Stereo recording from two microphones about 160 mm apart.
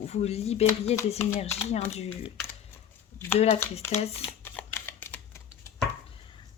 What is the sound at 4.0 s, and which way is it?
Speech, 40° left (ahead or behind).